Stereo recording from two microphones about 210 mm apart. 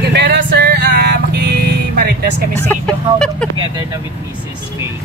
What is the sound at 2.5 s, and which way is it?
Speech, 5° left (ahead or behind).